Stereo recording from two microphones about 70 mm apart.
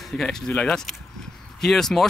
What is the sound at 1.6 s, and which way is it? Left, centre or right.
Speech, centre.